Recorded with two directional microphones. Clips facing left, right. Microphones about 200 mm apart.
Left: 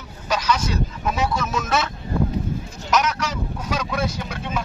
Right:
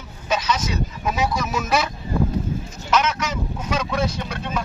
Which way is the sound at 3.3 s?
Centre (ahead or behind).